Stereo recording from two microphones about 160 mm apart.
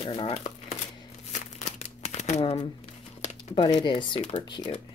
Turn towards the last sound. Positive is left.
turn(degrees=30)  # may be behind; listen again after turning